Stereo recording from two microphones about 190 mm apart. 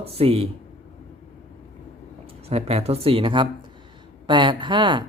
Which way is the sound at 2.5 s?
35° right (ahead or behind).